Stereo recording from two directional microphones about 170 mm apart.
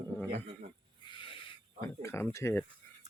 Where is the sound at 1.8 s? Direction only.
15° left (ahead or behind).